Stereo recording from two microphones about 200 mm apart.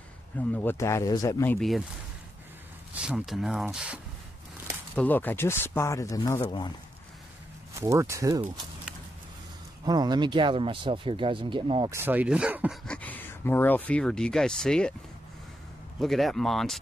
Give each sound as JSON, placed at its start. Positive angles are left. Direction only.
{"t": 0.4, "sound": "speech", "side_deg": 10}
{"t": 2.9, "sound": "speech", "side_deg": -5}
{"t": 4.9, "sound": "speech", "side_deg": 10}
{"t": 7.8, "sound": "speech", "side_deg": -15}
{"t": 9.8, "sound": "speech", "side_deg": -20}
{"t": 11.9, "sound": "speech", "side_deg": -10}
{"t": 12.8, "sound": "speech", "side_deg": 5}
{"t": 16.0, "sound": "speech", "side_deg": 0}